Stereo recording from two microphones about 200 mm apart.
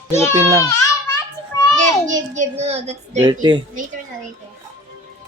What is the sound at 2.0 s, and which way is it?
Speech, 35° right (ahead or behind).